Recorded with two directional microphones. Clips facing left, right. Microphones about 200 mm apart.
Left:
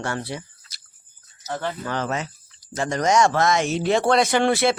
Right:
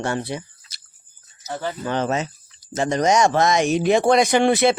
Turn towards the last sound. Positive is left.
turn(degrees=-20)  # may be behind; listen again after turning